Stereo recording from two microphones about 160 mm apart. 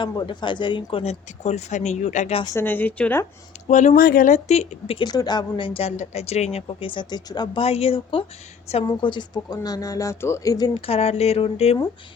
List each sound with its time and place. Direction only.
0.0 s a woman's voice: 30° left (ahead or behind); by 2.4 s 45° left (ahead or behind)
2.4 s a woman's voice: 20° left (ahead or behind)
3.7 s speech: 50° left (ahead or behind)
4.4 s speech: 45° left (ahead or behind)
4.9 s a woman's voice: 25° left (ahead or behind)
7.6 s a woman's voice: 40° left (ahead or behind); by 10.7 s 20° left (ahead or behind)
10.8 s a woman's voice: 40° left (ahead or behind)